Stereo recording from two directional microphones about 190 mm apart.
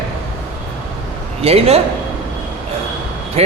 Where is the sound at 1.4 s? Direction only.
30° right (ahead or behind).